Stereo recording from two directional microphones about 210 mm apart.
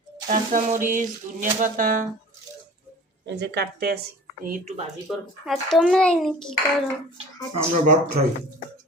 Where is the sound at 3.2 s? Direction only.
55° right (ahead or behind).